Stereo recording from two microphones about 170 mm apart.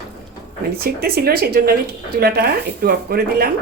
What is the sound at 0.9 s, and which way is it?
Speech, 65° right (ahead or behind).